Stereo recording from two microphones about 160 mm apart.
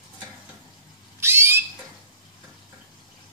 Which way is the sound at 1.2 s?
15° right (ahead or behind).